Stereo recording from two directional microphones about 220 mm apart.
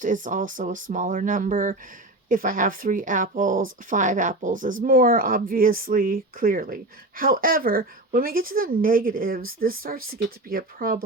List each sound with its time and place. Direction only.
0.0 s speech: 35° right (ahead or behind)